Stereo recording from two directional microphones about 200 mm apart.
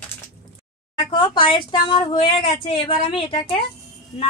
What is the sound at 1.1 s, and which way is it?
Speech, 25° left (ahead or behind).